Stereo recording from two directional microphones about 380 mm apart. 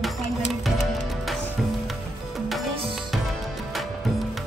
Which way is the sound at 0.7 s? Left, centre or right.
Centre.